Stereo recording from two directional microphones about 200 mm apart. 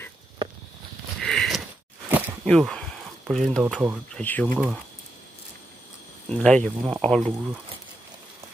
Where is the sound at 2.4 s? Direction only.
Centre (ahead or behind).